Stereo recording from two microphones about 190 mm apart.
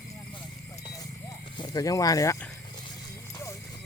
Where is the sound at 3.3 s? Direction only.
15° left (ahead or behind).